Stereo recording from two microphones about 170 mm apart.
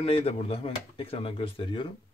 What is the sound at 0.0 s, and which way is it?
Speech, 35° left (ahead or behind).